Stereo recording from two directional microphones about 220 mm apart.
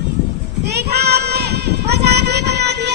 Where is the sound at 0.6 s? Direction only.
45° right (ahead or behind).